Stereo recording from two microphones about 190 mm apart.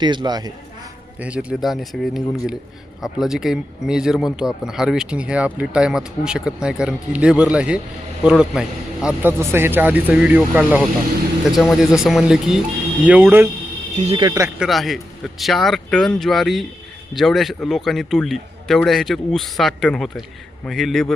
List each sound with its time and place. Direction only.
0.0 s a man's voice: 25° right (ahead or behind)
1.2 s a man's voice: 5° right (ahead or behind)
14.0 s speech: 30° right (ahead or behind)
14.3 s speech: 15° right (ahead or behind)
14.6 s a man's voice: centre (ahead or behind)